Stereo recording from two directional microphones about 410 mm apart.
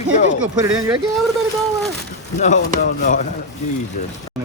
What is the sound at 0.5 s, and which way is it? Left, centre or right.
Speech, centre.